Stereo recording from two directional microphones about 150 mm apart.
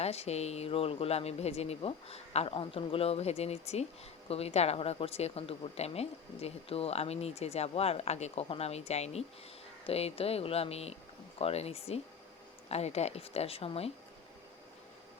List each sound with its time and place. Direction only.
0.0 s speech: 45° left (ahead or behind)